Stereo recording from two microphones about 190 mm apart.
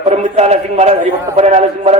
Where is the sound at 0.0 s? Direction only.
35° right (ahead or behind).